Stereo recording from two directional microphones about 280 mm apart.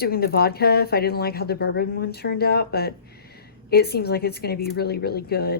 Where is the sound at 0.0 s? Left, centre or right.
Left.